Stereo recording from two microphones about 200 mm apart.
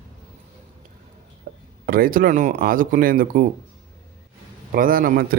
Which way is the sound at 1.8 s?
45° right (ahead or behind).